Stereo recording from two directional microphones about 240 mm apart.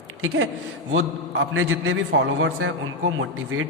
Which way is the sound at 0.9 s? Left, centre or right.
Right.